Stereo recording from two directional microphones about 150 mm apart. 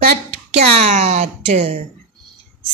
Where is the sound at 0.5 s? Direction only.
45° right (ahead or behind).